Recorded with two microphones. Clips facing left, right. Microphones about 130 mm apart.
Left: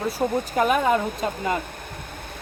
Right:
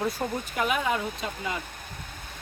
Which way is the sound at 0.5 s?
45° left (ahead or behind).